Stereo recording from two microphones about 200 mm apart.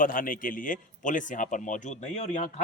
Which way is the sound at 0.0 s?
45° left (ahead or behind).